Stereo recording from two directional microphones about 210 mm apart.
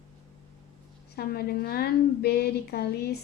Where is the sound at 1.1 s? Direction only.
45° left (ahead or behind).